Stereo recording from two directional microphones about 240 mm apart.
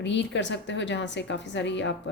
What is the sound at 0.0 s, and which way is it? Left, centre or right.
A woman's voice, left.